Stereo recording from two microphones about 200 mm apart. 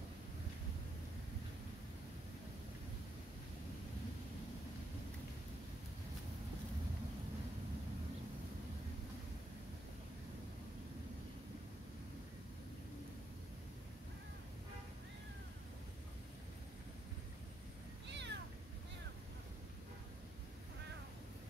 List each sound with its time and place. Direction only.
18.1 s cat: 60° right (ahead or behind)